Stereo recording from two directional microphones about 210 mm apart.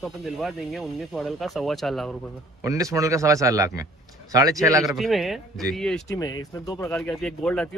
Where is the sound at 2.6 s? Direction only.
15° right (ahead or behind).